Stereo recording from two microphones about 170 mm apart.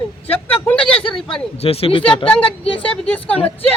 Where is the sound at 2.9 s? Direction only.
10° left (ahead or behind).